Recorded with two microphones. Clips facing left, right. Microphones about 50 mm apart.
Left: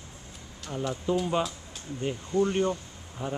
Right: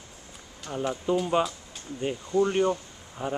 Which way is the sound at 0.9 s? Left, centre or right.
Centre.